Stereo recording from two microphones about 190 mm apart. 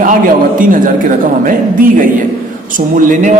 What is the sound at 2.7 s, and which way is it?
Speech, 45° right (ahead or behind).